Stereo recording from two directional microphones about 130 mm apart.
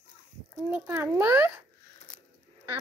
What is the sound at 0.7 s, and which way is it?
Speech, 15° right (ahead or behind).